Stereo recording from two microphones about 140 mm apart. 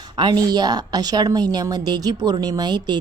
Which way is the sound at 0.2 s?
30° right (ahead or behind).